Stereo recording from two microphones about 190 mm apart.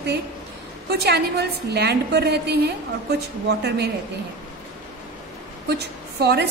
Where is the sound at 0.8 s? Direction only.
60° right (ahead or behind).